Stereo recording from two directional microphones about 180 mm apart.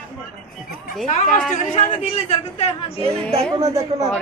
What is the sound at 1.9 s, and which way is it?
Speech, 35° left (ahead or behind).